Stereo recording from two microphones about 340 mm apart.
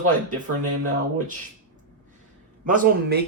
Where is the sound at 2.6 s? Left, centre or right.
Right.